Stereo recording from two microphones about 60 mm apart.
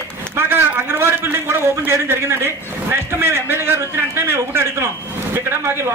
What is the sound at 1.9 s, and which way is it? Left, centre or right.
A man's voice, right.